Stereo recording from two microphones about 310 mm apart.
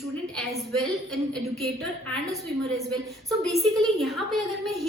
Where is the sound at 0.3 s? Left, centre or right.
Centre.